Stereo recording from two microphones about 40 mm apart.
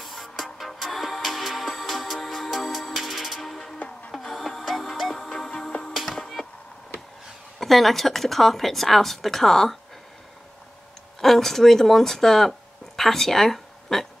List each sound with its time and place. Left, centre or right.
0.0 s music: centre
3.3 s music: centre
4.3 s music: centre
5.7 s music: centre
5.9 s music: centre
7.6 s speech: centre
11.1 s speech: centre